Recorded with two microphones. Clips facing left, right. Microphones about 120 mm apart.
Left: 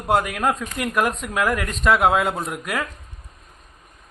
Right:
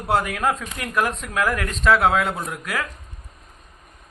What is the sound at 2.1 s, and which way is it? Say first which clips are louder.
Speech: left 1 dB; 25° left (ahead or behind).